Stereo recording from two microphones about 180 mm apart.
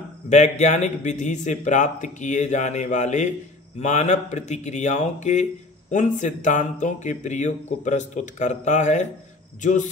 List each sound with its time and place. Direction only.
0.3 s speech: 40° left (ahead or behind)